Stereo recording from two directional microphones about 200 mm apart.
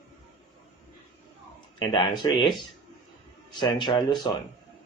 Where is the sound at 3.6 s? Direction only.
20° left (ahead or behind).